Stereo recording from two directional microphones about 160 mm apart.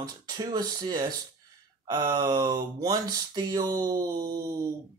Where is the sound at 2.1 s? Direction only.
25° right (ahead or behind).